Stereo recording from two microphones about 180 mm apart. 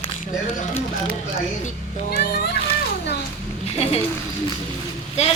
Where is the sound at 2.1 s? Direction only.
55° left (ahead or behind).